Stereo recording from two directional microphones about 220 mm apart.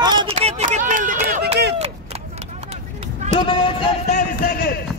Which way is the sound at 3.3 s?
25° left (ahead or behind).